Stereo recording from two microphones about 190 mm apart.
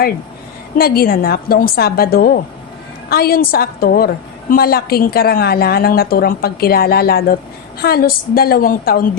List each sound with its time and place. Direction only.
0.8 s a woman's voice: 50° left (ahead or behind)